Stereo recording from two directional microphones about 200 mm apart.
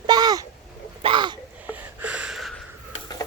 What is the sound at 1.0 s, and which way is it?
Speech, 25° right (ahead or behind).